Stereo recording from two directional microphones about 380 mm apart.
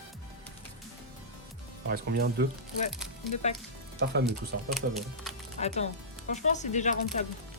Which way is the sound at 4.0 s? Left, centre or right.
Right.